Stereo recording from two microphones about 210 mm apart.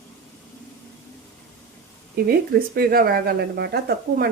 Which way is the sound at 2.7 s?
45° right (ahead or behind).